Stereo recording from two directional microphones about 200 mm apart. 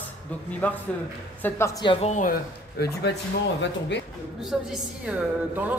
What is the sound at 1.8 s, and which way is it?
Speech, 35° left (ahead or behind).